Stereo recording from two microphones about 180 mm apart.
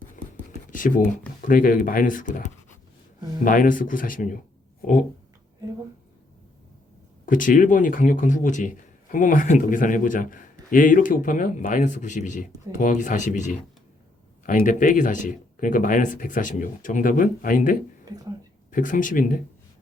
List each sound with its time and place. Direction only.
0.3 s a sound: 45° left (ahead or behind)
1.5 s a man's voice: 50° left (ahead or behind)
7.3 s a man's voice: 50° left (ahead or behind)